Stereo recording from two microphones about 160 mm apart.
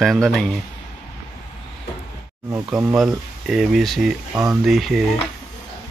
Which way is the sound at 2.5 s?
20° right (ahead or behind).